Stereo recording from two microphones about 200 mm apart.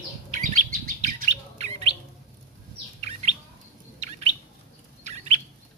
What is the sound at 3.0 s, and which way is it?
Chirp, 35° right (ahead or behind).